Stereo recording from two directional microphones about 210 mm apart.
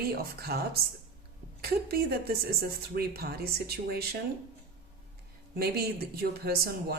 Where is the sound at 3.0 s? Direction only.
45° right (ahead or behind).